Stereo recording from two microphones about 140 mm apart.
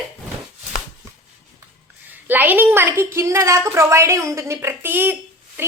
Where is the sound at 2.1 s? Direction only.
15° right (ahead or behind).